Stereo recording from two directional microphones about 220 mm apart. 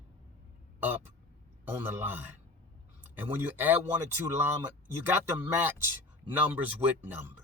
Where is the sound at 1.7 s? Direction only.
10° right (ahead or behind).